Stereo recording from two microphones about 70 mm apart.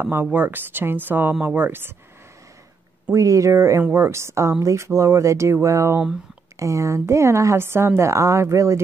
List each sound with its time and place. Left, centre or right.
0.0 s speech: right
3.1 s a woman's voice: right